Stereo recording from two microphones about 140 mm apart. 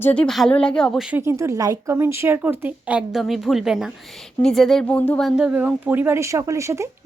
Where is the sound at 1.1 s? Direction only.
15° right (ahead or behind); by 5.2 s 10° left (ahead or behind).